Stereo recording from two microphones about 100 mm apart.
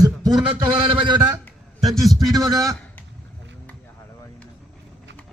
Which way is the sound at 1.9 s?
Centre (ahead or behind).